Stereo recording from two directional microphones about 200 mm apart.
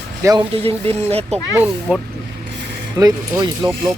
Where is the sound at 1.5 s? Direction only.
10° right (ahead or behind).